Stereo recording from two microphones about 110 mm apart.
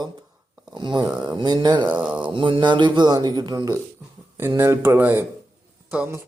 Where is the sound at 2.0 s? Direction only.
10° right (ahead or behind).